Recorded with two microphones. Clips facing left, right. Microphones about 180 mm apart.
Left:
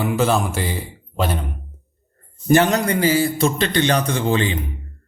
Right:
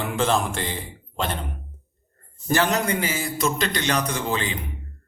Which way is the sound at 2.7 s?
35° left (ahead or behind).